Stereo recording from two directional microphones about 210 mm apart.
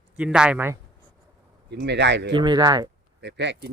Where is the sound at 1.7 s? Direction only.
55° right (ahead or behind).